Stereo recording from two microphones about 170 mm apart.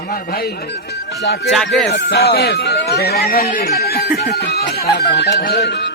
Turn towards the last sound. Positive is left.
turn(degrees=85)